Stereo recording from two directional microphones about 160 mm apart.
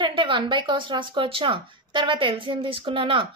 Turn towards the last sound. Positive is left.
turn(degrees=-35)  # may be behind; listen again after turning